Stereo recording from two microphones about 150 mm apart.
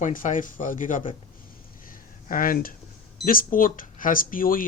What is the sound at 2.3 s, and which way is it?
Speech, 65° left (ahead or behind).